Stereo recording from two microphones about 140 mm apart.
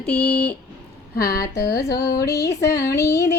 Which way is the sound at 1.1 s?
90° left.